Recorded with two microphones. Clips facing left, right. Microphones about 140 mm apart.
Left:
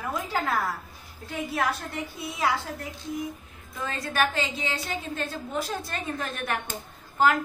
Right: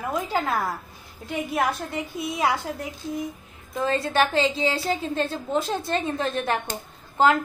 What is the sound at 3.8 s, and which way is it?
A woman's voice, 30° right (ahead or behind).